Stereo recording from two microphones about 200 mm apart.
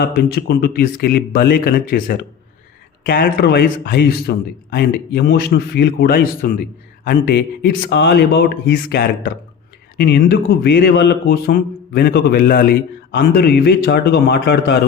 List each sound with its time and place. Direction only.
0.0 s a man's voice: 50° left (ahead or behind)